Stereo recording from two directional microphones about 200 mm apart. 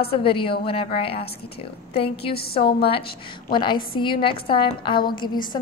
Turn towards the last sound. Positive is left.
turn(degrees=20)  # may be behind; listen again after turning